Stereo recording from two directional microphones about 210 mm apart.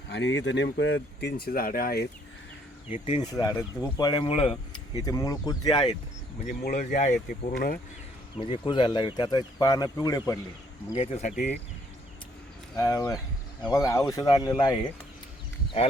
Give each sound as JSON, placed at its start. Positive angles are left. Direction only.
{"t": 0.1, "sound": "speech", "side_deg": 60}
{"t": 2.9, "sound": "speech", "side_deg": 20}
{"t": 4.9, "sound": "speech", "side_deg": 15}
{"t": 6.4, "sound": "speech", "side_deg": 40}
{"t": 8.4, "sound": "speech", "side_deg": 25}
{"t": 10.9, "sound": "speech", "side_deg": 30}
{"t": 11.3, "sound": "speech", "side_deg": 50}
{"t": 12.7, "sound": "speech", "side_deg": 20}